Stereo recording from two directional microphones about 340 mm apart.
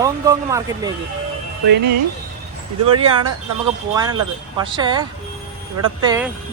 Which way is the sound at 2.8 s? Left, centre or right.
Right.